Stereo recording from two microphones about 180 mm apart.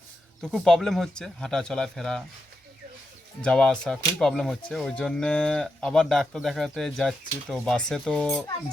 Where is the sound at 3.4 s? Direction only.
5° left (ahead or behind).